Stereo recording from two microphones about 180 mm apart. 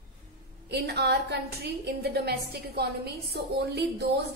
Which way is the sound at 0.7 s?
65° right (ahead or behind).